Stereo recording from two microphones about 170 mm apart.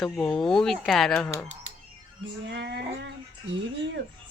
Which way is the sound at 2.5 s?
80° right.